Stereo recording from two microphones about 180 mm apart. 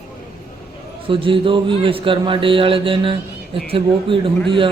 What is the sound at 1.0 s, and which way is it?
A man's voice, 30° right (ahead or behind).